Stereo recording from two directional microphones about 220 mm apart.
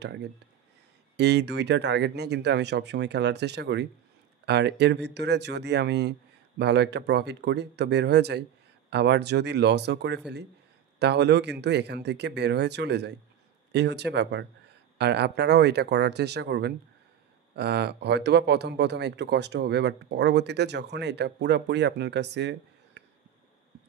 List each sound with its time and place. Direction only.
0.0 s speech: 50° right (ahead or behind)